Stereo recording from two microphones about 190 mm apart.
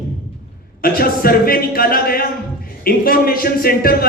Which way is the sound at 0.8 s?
50° left (ahead or behind).